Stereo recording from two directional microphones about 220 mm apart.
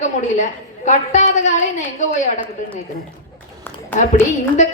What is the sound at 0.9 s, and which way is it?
A woman's voice, 35° left (ahead or behind).